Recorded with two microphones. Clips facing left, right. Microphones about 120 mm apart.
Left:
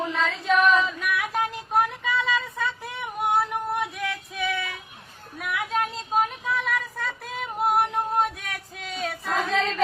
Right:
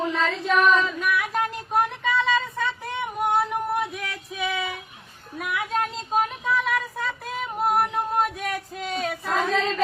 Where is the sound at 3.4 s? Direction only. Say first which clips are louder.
Right 2 dB; centre (ahead or behind).